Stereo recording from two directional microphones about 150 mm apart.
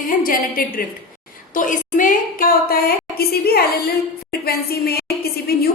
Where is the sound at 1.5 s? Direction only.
60° left (ahead or behind).